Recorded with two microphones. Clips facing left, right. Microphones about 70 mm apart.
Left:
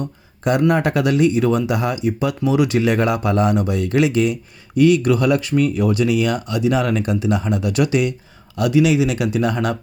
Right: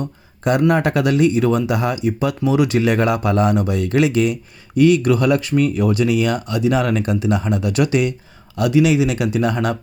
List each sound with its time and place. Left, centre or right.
0.7 s speech: right
4.8 s speech: right
8.5 s speech: right